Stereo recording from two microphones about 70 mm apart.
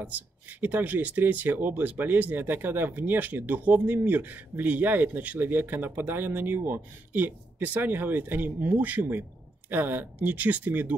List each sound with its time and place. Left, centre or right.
0.0 s speech: right